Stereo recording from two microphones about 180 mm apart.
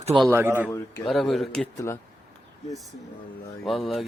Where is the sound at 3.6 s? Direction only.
Centre (ahead or behind).